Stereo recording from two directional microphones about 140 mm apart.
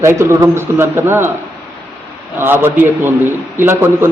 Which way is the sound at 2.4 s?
15° right (ahead or behind).